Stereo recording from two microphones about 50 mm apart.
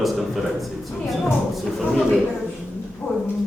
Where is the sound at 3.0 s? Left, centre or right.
Left.